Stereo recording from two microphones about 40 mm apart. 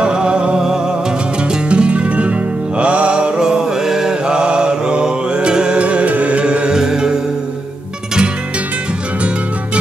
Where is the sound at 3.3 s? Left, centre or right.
Centre.